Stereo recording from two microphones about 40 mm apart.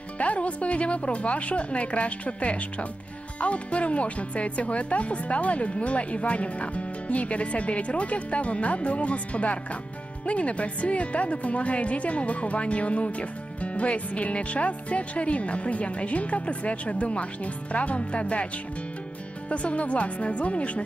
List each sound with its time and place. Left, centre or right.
0.2 s a woman's voice: left
19.5 s a woman's voice: left